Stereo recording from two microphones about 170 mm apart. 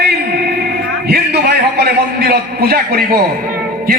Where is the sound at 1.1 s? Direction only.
75° right (ahead or behind).